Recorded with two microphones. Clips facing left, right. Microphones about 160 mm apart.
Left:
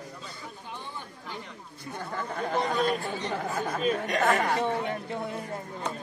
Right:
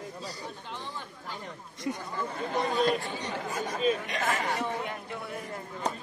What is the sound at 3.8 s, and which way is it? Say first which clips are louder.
Speech: left 1 dB; 45° left (ahead or behind).